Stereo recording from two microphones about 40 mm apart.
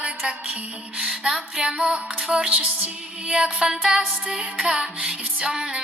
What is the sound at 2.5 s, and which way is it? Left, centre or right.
Female singing, right.